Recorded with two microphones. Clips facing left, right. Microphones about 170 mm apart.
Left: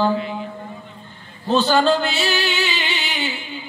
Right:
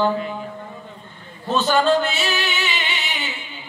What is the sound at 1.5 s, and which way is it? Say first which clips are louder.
Singing: left 1 dB; 30° left (ahead or behind).